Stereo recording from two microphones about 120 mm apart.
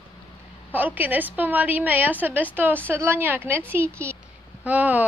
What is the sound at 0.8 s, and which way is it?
A woman's voice, 15° right (ahead or behind).